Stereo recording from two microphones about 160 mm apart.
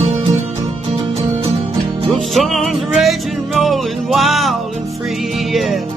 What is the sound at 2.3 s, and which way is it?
Music, centre (ahead or behind).